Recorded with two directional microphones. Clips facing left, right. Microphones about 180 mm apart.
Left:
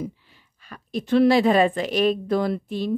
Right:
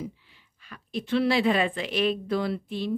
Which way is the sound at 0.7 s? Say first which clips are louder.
Left 5 dB; 45° left (ahead or behind).